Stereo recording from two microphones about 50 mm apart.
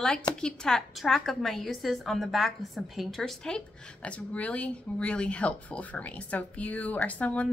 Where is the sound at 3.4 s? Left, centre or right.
Centre.